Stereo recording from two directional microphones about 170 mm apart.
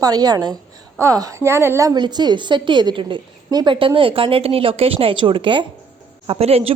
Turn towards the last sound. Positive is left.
turn(degrees=-35)  # may be behind; listen again after turning